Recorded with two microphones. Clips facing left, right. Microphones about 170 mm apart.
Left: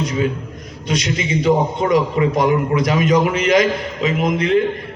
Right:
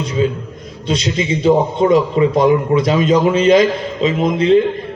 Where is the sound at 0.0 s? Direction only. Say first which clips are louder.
Right 3 dB; 25° right (ahead or behind).